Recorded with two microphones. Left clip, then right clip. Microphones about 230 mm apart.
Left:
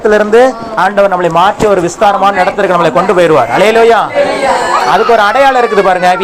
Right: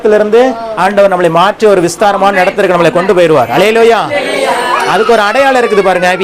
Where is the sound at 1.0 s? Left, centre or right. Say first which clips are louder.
Right 2 dB; right.